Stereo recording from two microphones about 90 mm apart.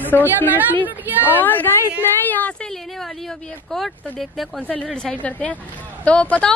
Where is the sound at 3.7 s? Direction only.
Centre (ahead or behind).